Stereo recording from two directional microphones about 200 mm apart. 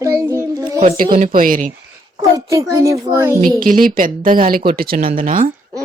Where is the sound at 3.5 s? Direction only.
45° right (ahead or behind).